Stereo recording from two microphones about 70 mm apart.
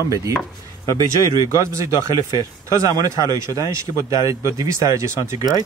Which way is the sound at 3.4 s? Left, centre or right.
Right.